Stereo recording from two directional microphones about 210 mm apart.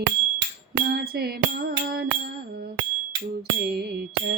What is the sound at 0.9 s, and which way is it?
Music, 50° right (ahead or behind).